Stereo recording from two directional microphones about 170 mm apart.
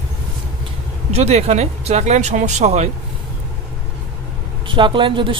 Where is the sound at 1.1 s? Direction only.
40° right (ahead or behind).